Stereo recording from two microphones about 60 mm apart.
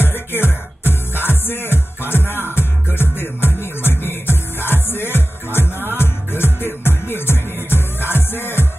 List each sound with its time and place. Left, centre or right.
0.0 s music: left